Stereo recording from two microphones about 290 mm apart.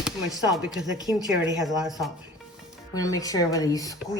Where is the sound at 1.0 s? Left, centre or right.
Centre.